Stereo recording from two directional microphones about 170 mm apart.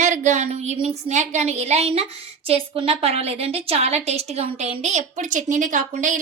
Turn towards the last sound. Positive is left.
turn(degrees=-50)  # may be behind; listen again after turning